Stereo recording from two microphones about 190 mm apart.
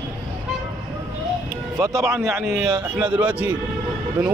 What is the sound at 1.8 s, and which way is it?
Speech, 15° right (ahead or behind).